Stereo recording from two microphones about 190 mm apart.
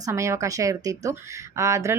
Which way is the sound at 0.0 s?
15° right (ahead or behind).